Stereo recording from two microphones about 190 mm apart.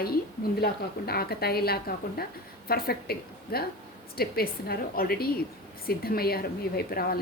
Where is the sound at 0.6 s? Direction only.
55° left (ahead or behind).